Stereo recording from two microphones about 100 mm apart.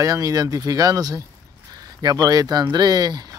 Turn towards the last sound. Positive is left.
turn(degrees=-45)  # may be behind; listen again after turning